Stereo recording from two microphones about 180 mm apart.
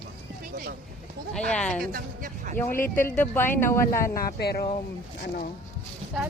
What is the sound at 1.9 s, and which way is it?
Speech, 50° right (ahead or behind).